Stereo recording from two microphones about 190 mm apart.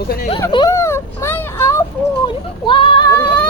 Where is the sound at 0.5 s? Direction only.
20° left (ahead or behind).